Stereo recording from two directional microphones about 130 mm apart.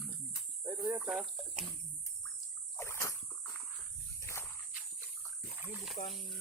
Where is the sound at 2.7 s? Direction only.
20° left (ahead or behind).